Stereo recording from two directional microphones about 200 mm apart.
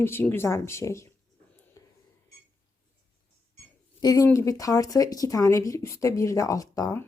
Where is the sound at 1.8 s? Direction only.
15° left (ahead or behind).